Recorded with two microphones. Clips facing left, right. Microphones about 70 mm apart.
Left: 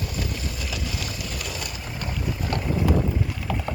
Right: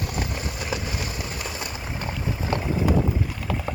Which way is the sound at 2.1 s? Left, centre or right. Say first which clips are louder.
Right 1 dB; centre.